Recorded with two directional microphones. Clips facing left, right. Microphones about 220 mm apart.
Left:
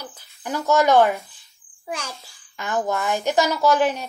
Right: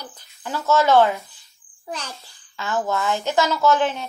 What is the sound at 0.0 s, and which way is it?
Speech, 10° left (ahead or behind).